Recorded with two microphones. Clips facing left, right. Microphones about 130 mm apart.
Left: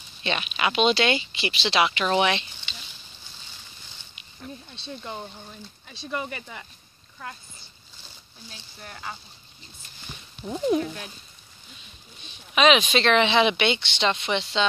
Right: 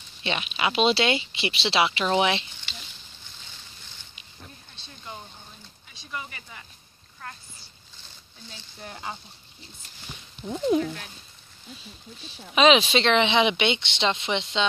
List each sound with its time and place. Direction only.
0.2 s speech: 20° right (ahead or behind)
4.7 s speech: 25° left (ahead or behind)
8.8 s speech: 20° right (ahead or behind)
10.4 s speech: 10° left (ahead or behind)
12.3 s speech: 30° right (ahead or behind)